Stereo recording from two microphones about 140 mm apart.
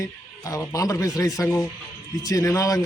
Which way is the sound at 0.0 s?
25° left (ahead or behind).